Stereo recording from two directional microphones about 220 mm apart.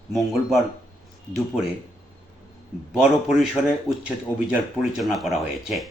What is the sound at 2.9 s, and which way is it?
Speech, 5° right (ahead or behind).